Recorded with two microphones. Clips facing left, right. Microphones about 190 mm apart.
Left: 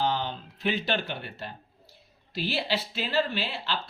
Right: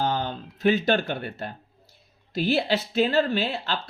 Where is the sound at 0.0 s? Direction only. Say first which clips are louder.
Right 2 dB; 45° right (ahead or behind).